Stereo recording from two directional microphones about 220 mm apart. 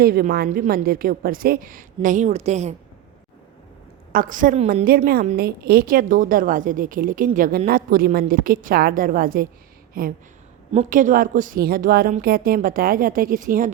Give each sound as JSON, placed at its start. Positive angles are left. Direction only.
{"t": 0.0, "sound": "a woman's voice", "side_deg": -45}
{"t": 4.1, "sound": "a woman's voice", "side_deg": -40}